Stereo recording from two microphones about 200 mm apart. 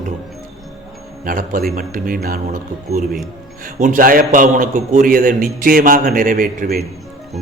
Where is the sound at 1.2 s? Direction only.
45° right (ahead or behind).